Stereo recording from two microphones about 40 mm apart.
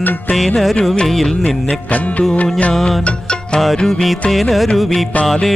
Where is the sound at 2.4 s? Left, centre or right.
Left.